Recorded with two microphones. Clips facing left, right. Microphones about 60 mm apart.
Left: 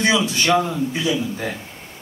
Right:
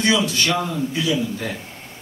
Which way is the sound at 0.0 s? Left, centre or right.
Left.